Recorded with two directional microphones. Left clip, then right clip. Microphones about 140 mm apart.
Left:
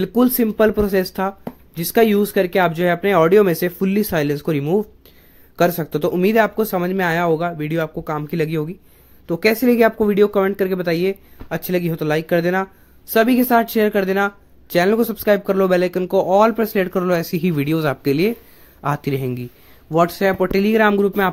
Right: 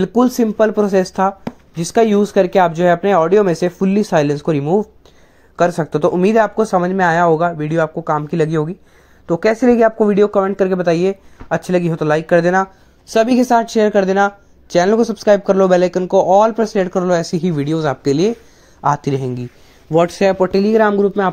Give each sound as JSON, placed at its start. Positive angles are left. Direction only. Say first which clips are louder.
{"t": 0.0, "sound": "speech", "louder": "right 3 dB", "side_deg": 0}
{"t": 18.8, "sound": "speech", "louder": "right 6 dB", "side_deg": 5}
{"t": 19.9, "sound": "speech", "louder": "right 3 dB", "side_deg": -10}
{"t": 20.5, "sound": "speech", "louder": "right 3 dB", "side_deg": 10}